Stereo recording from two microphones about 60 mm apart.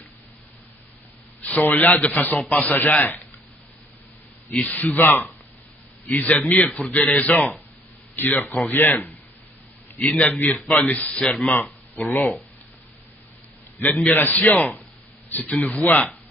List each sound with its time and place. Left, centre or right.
1.4 s a man's voice: left
4.5 s a man's voice: left
11.2 s speech: centre
12.0 s a man's voice: left
13.8 s a man's voice: left
15.5 s a man's voice: left